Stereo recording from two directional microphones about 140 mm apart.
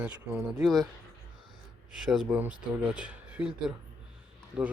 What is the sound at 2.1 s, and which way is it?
Speech, 5° right (ahead or behind).